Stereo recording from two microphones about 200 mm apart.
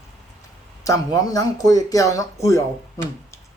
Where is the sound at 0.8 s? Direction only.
15° left (ahead or behind).